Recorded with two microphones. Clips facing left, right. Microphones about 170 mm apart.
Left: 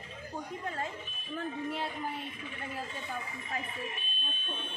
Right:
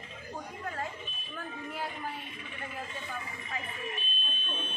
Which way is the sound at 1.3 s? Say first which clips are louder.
Left 5 dB; 25° left (ahead or behind).